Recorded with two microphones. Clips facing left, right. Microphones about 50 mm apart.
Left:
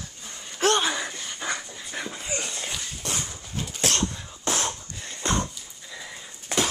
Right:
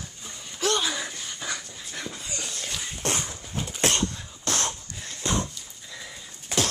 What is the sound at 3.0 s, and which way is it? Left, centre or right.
Dog, right.